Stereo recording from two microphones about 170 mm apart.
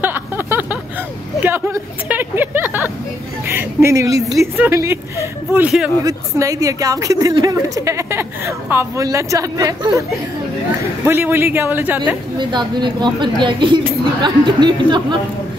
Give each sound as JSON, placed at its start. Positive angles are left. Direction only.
{"t": 0.0, "sound": "a sound", "side_deg": -10}
{"t": 1.4, "sound": "speech", "side_deg": -10}
{"t": 6.0, "sound": "a woman's voice", "side_deg": -20}
{"t": 12.4, "sound": "a woman's voice", "side_deg": -25}